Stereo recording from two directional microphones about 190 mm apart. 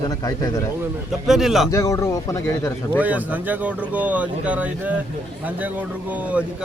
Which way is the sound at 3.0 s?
10° right (ahead or behind).